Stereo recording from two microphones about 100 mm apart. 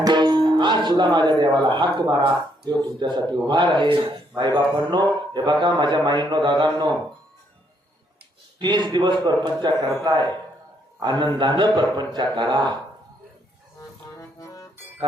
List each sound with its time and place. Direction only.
0.0 s speech: 50° right (ahead or behind)
8.5 s speech: 50° right (ahead or behind)
14.2 s music: 35° left (ahead or behind)